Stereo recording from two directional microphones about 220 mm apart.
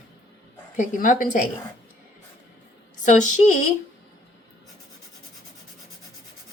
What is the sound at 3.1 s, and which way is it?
Speech, 35° left (ahead or behind).